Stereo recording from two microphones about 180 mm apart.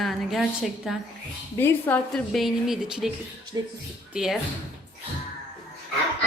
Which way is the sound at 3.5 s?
20° right (ahead or behind).